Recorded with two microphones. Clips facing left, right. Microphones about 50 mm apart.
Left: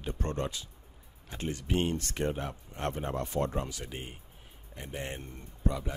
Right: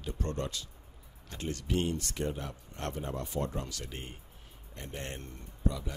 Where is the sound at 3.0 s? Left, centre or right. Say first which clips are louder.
Left 3 dB; left.